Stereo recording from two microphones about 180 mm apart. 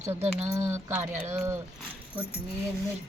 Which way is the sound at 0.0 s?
15° right (ahead or behind).